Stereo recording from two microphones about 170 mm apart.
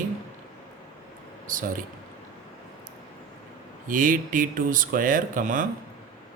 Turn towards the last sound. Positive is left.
turn(degrees=-50)  # may be behind; listen again after turning